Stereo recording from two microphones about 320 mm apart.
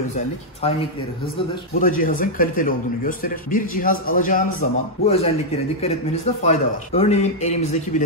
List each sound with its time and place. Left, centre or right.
1.8 s a man's voice: left
6.4 s a man's voice: left